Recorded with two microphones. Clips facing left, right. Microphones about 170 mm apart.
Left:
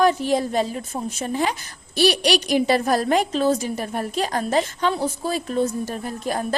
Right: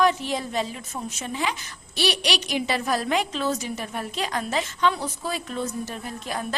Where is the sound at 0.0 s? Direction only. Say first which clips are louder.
Left 4 dB; 40° left (ahead or behind).